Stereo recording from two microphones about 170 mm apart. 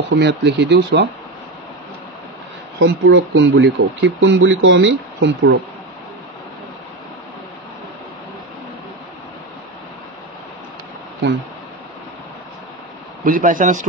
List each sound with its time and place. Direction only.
0.1 s speech: 90° right
2.8 s speech: 90° right
13.2 s a man's voice: 55° right (ahead or behind)